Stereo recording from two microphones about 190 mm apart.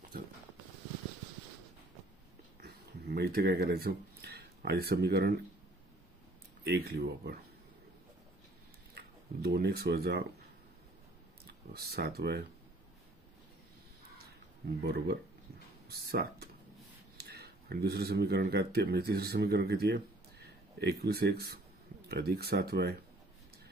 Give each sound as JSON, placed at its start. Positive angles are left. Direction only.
{"t": 2.6, "sound": "a sound", "side_deg": -60}
{"t": 6.6, "sound": "speech", "side_deg": -60}
{"t": 8.9, "sound": "speech", "side_deg": -60}
{"t": 11.7, "sound": "speech", "side_deg": -55}
{"t": 14.8, "sound": "speech", "side_deg": -60}